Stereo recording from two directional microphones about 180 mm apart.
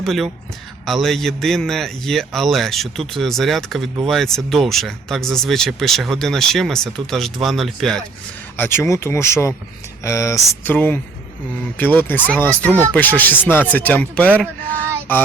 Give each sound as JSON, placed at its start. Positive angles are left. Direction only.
{"t": 0.0, "sound": "speech", "side_deg": 0}
{"t": 8.5, "sound": "speech", "side_deg": 10}